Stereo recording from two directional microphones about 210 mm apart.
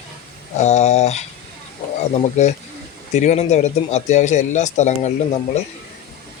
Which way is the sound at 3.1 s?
35° left (ahead or behind).